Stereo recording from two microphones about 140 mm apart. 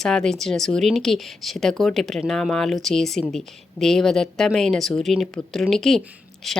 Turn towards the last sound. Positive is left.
turn(degrees=0)  # may be behind; listen again after turning